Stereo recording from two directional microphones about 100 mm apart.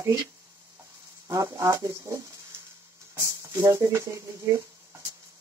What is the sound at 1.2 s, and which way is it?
Speech, 35° right (ahead or behind).